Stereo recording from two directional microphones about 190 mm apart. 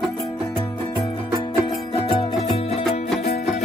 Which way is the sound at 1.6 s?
25° left (ahead or behind).